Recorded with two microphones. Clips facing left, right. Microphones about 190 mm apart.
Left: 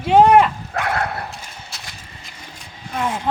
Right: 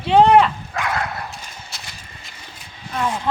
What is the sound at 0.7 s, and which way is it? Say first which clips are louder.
Dog: left 2 dB; 55° left (ahead or behind).